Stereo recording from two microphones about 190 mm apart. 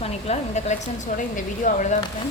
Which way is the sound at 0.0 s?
35° left (ahead or behind).